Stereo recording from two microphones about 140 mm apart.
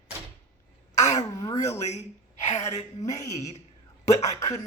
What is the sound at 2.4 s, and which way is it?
Speech, 50° left (ahead or behind).